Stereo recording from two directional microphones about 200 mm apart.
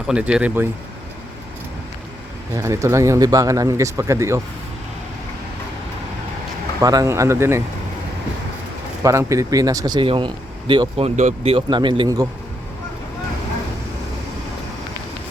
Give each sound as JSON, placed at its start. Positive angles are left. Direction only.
{"t": 0.1, "sound": "speech", "side_deg": -5}
{"t": 2.6, "sound": "speech", "side_deg": -15}
{"t": 6.8, "sound": "speech", "side_deg": -15}
{"t": 9.0, "sound": "speech", "side_deg": -15}